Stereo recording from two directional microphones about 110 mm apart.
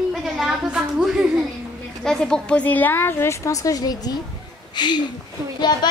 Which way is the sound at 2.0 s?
5° left (ahead or behind).